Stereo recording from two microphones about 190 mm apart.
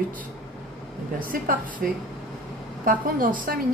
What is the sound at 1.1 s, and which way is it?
Speech, 45° right (ahead or behind).